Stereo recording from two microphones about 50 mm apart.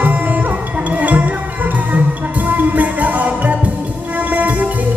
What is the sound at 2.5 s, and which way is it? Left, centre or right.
Music, right.